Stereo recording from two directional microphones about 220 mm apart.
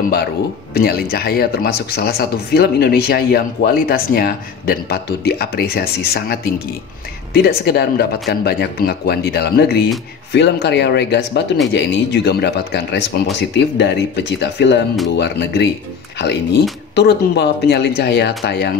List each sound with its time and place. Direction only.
0.7 s speech: 45° left (ahead or behind)
7.4 s speech: 45° left (ahead or behind)